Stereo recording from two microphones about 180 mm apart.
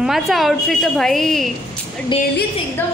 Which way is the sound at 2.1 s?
30° left (ahead or behind).